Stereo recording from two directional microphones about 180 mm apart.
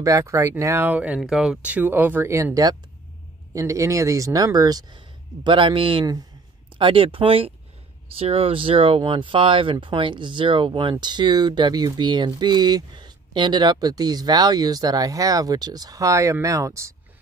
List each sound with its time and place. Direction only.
0.0 s speech: 15° right (ahead or behind)